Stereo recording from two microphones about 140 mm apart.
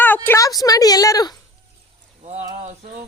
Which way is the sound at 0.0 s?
15° left (ahead or behind).